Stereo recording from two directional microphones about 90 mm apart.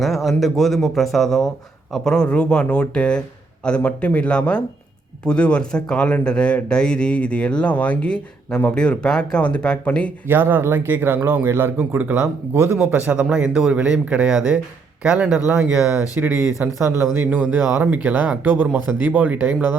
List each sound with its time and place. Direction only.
0.0 s speech: centre (ahead or behind)
10.2 s a man's voice: 25° right (ahead or behind)
16.6 s a man's voice: 20° right (ahead or behind)